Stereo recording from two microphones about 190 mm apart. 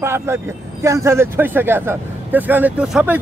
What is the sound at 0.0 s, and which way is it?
Speech, 15° right (ahead or behind).